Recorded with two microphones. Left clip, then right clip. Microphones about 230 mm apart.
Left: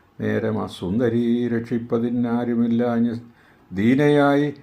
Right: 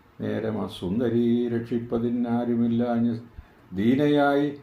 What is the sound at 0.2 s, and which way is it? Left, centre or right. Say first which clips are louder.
Speech: left 5 dB; left.